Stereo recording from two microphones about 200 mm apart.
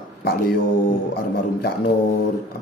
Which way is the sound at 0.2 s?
50° left (ahead or behind).